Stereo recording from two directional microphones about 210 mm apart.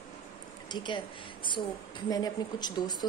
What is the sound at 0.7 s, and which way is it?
Speech, 20° left (ahead or behind).